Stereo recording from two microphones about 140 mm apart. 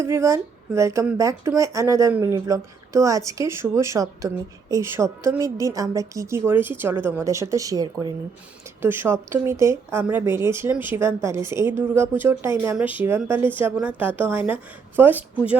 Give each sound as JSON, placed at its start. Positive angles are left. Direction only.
{"t": 0.0, "sound": "speech", "side_deg": -20}